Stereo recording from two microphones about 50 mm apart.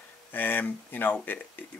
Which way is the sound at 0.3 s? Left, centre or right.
Left.